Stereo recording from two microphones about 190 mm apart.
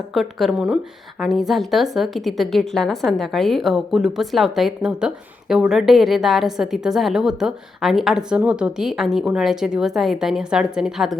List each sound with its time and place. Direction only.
0.1 s a woman's voice: centre (ahead or behind)